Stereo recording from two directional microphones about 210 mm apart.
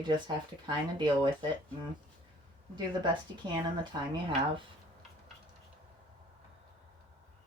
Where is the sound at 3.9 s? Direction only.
20° right (ahead or behind).